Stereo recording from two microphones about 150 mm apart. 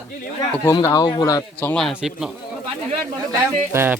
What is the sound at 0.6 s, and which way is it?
Speech, 20° left (ahead or behind).